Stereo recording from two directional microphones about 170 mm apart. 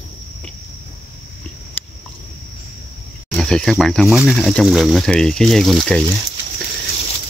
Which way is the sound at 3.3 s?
5° left (ahead or behind).